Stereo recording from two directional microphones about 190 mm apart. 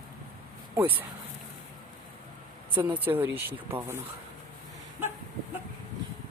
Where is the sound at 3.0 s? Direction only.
10° right (ahead or behind).